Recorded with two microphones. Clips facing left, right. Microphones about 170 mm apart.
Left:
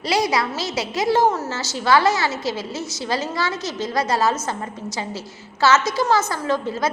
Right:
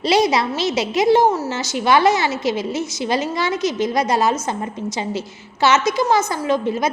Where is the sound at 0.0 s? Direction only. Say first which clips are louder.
Right 4 dB; 20° right (ahead or behind).